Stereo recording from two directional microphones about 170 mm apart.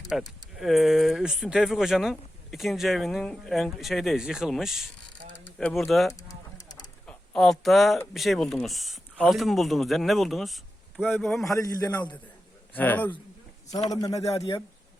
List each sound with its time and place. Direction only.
0.1 s speech: centre (ahead or behind)
6.1 s a sound: 20° left (ahead or behind)
7.1 s speech: centre (ahead or behind)
11.4 s a man's voice: 20° left (ahead or behind)
12.7 s a man's voice: 10° left (ahead or behind)
14.2 s a man's voice: 35° left (ahead or behind)